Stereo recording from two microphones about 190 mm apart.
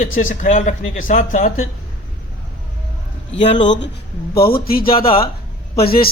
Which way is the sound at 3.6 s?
70° left (ahead or behind).